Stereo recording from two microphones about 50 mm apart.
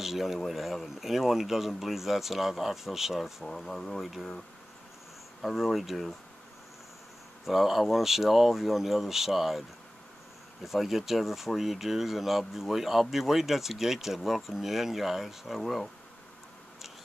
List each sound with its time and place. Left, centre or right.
0.0 s speech: centre
3.4 s speech: centre
4.0 s speech: centre
5.4 s speech: centre
7.4 s speech: centre